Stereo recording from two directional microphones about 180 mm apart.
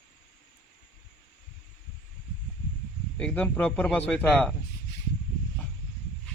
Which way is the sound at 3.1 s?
5° left (ahead or behind).